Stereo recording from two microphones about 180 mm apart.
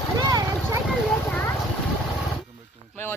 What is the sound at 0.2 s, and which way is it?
Vehicle, 20° right (ahead or behind).